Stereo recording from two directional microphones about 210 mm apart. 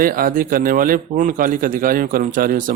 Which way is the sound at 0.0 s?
45° right (ahead or behind).